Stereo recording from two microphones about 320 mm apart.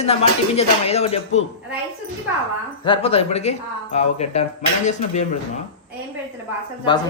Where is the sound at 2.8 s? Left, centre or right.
Centre.